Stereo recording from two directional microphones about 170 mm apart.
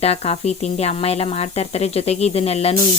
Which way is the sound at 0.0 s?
40° left (ahead or behind).